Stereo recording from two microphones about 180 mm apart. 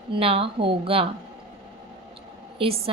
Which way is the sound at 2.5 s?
30° right (ahead or behind).